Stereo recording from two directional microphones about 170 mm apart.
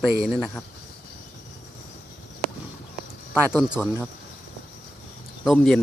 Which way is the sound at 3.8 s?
20° right (ahead or behind).